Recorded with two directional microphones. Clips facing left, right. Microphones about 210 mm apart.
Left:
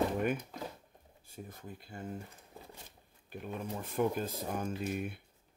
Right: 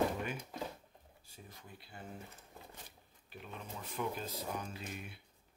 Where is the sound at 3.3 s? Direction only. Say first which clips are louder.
Left 8 dB; 50° left (ahead or behind).